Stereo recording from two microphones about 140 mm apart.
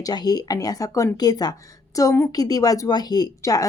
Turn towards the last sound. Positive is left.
turn(degrees=25)  # may be behind; listen again after turning